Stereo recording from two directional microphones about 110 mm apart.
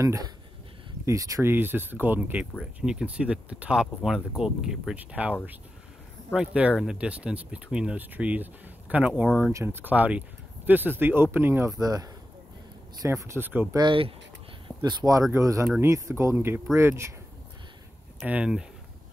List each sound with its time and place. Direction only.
0.0 s speech: 30° right (ahead or behind)
1.5 s speech: 20° right (ahead or behind)
6.3 s speech: 10° right (ahead or behind)
9.5 s speech: 25° right (ahead or behind)
11.7 s speech: 35° right (ahead or behind); by 13.7 s 20° right (ahead or behind)
13.7 s speech: 50° right (ahead or behind)
14.8 s speech: 35° right (ahead or behind)
18.2 s speech: 10° right (ahead or behind)